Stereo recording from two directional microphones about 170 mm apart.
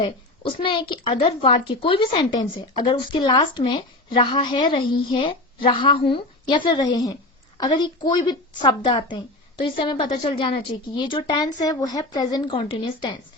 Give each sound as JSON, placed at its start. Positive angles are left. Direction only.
{"t": 0.0, "sound": "a woman's voice", "side_deg": 30}